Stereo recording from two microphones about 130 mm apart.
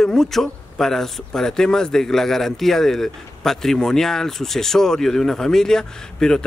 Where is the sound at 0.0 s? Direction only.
5° left (ahead or behind).